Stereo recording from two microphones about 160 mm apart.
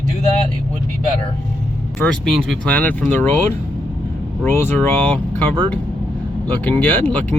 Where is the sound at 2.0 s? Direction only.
5° left (ahead or behind).